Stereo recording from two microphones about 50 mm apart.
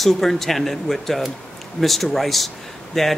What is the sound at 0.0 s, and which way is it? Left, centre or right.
Speech, centre.